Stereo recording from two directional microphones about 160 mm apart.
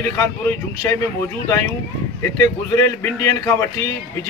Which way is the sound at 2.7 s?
20° left (ahead or behind).